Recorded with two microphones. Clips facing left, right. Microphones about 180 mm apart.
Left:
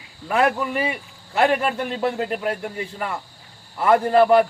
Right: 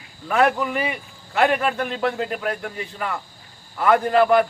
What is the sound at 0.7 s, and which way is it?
Speech, 25° left (ahead or behind).